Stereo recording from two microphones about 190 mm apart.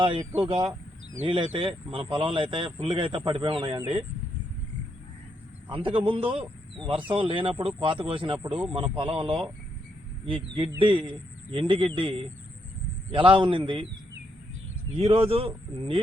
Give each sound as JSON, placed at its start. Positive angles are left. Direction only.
{"t": 0.4, "sound": "speech", "side_deg": -25}
{"t": 0.7, "sound": "a sound", "side_deg": -10}
{"t": 1.5, "sound": "speech", "side_deg": -25}
{"t": 5.6, "sound": "speech", "side_deg": -25}
{"t": 14.9, "sound": "speech", "side_deg": -30}